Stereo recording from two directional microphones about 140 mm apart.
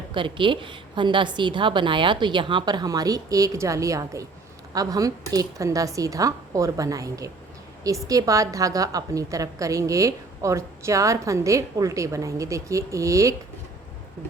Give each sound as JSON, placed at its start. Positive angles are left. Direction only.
{"t": 0.1, "sound": "a woman's voice", "side_deg": -35}